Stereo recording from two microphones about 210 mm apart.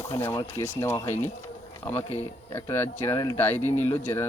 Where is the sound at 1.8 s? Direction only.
25° left (ahead or behind).